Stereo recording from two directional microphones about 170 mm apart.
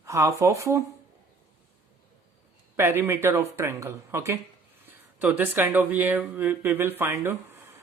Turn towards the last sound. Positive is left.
turn(degrees=-15)  # may be behind; listen again after turning